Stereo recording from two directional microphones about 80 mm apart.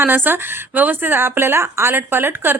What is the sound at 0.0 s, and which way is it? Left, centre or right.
Speech, right.